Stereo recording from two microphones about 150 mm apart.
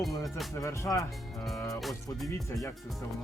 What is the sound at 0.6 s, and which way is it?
Speech, 20° left (ahead or behind).